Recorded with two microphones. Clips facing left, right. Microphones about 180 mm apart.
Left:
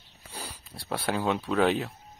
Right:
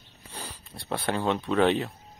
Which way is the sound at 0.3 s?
10° left (ahead or behind).